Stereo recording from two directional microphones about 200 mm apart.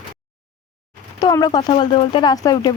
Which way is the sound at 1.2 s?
20° left (ahead or behind).